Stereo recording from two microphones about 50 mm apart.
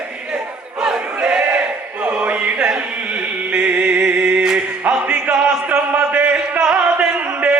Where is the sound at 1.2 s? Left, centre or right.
Right.